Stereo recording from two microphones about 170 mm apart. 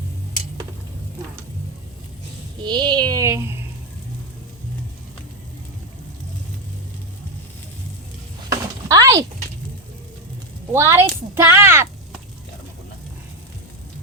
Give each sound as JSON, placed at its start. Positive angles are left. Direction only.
{"t": 2.6, "sound": "a sound", "side_deg": -25}
{"t": 8.4, "sound": "chop", "side_deg": -20}
{"t": 10.7, "sound": "speech", "side_deg": -15}